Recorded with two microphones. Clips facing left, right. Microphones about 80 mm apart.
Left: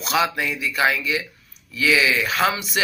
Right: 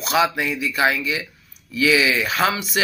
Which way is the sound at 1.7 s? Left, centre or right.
Left.